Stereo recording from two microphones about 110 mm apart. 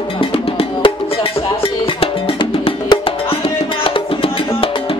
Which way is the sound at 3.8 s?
55° left (ahead or behind).